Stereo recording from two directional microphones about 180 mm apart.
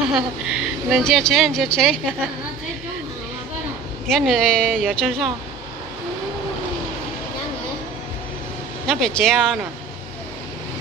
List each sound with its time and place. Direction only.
0.1 s speech: 5° right (ahead or behind)
4.1 s speech: centre (ahead or behind)
8.8 s speech: 5° left (ahead or behind)